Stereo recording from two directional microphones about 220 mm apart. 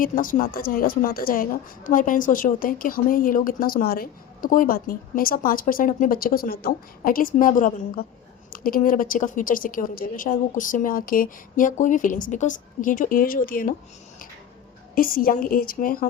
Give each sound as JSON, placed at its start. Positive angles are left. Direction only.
{"t": 0.0, "sound": "a woman's voice", "side_deg": 40}
{"t": 14.9, "sound": "a woman's voice", "side_deg": 40}